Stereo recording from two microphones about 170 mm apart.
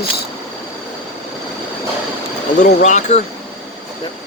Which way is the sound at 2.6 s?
45° left (ahead or behind).